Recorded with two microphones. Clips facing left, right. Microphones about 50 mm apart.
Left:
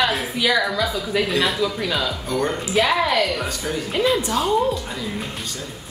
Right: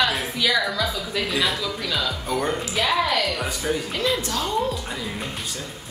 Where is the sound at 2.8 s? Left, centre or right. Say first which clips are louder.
Left 4 dB; centre.